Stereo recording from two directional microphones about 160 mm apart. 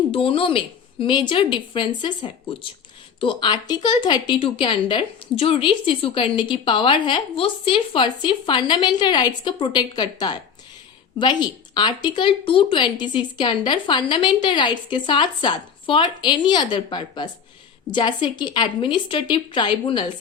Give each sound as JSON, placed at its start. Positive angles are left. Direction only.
{"t": 0.1, "sound": "a woman's voice", "side_deg": 35}